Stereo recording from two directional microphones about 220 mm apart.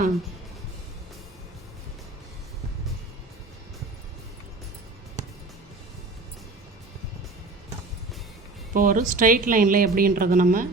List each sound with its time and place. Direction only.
8.7 s a woman's voice: 40° right (ahead or behind)